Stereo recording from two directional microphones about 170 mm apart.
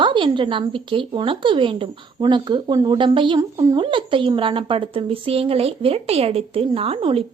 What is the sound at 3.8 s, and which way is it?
A woman's voice, 30° right (ahead or behind).